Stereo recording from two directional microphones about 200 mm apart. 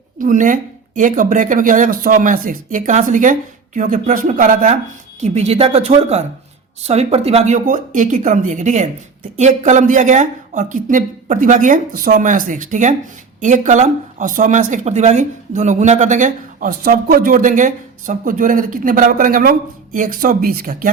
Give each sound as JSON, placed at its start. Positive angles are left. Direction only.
{"t": 0.2, "sound": "a woman's voice", "side_deg": -40}